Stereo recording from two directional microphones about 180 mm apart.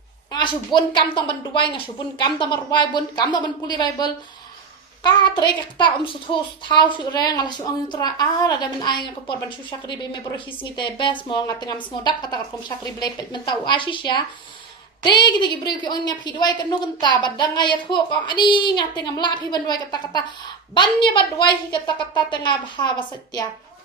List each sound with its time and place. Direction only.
0.3 s a woman's voice: 25° left (ahead or behind)